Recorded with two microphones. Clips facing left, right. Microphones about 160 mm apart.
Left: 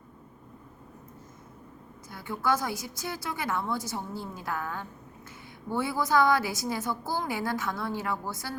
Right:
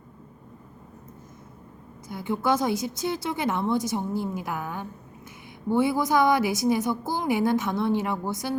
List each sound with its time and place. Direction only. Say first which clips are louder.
2.0 s a woman's voice: right 4 dB; 20° right (ahead or behind)